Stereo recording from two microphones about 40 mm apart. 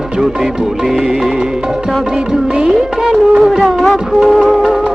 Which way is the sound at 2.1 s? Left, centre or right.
Right.